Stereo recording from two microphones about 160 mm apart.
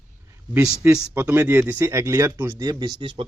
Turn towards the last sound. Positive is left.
turn(degrees=-30)  # may be behind; listen again after turning